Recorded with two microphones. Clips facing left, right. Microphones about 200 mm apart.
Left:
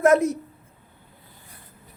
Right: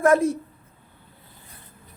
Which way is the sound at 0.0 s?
25° left (ahead or behind).